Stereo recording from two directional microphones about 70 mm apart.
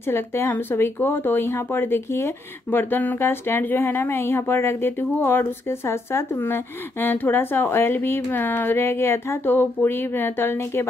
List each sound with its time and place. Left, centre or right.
0.1 s speech: left